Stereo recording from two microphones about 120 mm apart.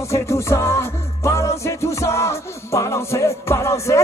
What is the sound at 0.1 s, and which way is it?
Music, 25° left (ahead or behind).